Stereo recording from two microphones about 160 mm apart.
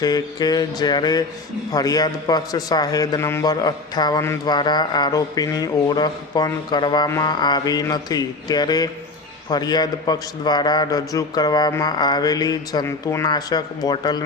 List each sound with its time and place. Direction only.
0.0 s a man's voice: 25° left (ahead or behind)